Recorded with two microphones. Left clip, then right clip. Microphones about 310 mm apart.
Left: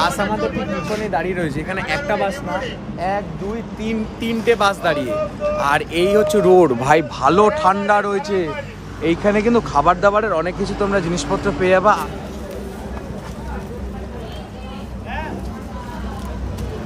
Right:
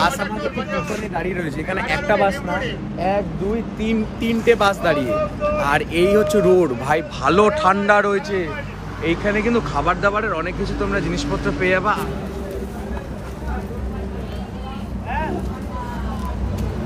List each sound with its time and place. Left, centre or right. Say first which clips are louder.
0.4 s speech: left 1 dB; right
0.8 s speech: left 4 dB; centre
3.8 s speech: even; centre
6.8 s speech: left 5 dB; left
7.2 s speech: left 2 dB; centre